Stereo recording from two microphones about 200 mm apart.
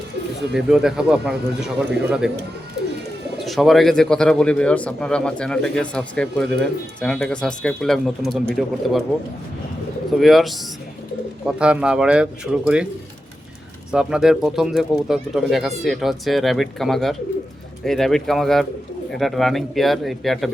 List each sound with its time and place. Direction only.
0.5 s speech: 5° right (ahead or behind)
3.3 s speech: centre (ahead or behind)
10.2 s speech: centre (ahead or behind)
13.9 s speech: 5° right (ahead or behind)